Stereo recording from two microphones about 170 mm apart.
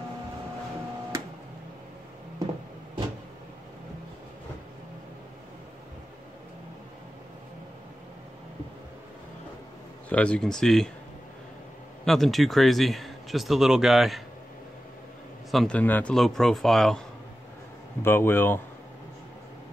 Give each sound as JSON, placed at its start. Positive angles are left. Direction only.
{"t": 10.0, "sound": "speech", "side_deg": 5}
{"t": 12.0, "sound": "speech", "side_deg": 0}
{"t": 15.5, "sound": "speech", "side_deg": 5}
{"t": 18.0, "sound": "a man's voice", "side_deg": 15}